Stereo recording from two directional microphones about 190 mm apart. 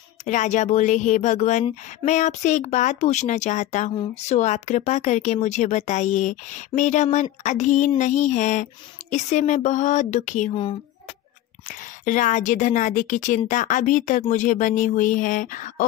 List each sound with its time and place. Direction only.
0.2 s speech: 40° left (ahead or behind)
10.5 s speech: 25° left (ahead or behind)
12.0 s speech: 45° left (ahead or behind)